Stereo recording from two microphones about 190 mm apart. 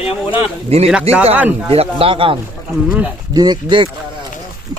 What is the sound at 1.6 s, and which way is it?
A man's voice, 30° right (ahead or behind).